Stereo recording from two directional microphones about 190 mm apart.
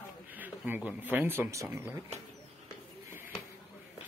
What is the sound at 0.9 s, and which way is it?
Speech, 10° right (ahead or behind).